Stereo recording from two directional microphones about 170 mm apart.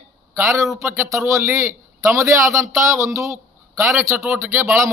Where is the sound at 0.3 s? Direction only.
15° right (ahead or behind).